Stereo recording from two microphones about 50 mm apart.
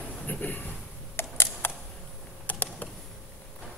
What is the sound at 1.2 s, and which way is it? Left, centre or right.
Camera, left.